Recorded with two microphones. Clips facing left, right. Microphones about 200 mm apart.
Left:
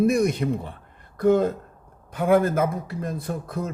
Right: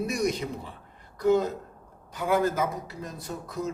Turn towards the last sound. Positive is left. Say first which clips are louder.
# left 4 dB
turn(degrees=55)  # may be behind; listen again after turning